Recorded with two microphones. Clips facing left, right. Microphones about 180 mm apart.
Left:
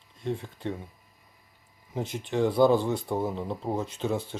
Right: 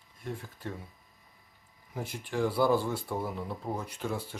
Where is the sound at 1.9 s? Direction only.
20° left (ahead or behind).